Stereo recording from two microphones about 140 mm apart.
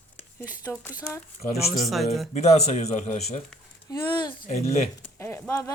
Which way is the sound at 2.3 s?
55° left (ahead or behind).